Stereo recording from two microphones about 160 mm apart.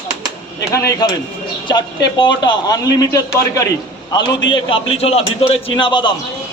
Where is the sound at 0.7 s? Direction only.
20° left (ahead or behind).